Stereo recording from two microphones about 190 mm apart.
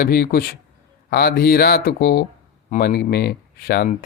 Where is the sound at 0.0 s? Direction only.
50° left (ahead or behind).